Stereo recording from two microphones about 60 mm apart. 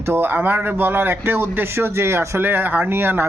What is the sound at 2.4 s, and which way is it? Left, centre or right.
Speech, right.